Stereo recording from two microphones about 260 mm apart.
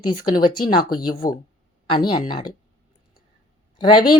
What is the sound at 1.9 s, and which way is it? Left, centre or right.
Speech, centre.